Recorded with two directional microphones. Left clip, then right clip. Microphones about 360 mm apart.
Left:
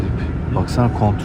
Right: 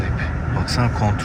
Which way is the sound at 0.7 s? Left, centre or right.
Centre.